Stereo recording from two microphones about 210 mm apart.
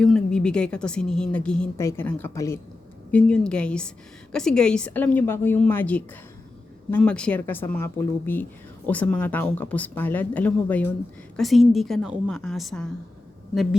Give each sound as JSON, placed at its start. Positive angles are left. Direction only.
{"t": 0.0, "sound": "a woman's voice", "side_deg": 5}